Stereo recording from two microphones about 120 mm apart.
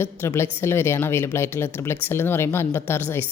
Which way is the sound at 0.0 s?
20° left (ahead or behind).